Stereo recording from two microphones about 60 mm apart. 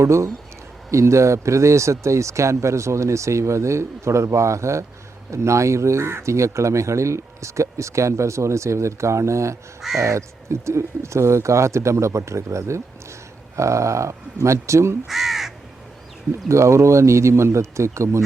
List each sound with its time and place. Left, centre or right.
0.0 s speech: right
15.0 s speech: centre
16.5 s speech: right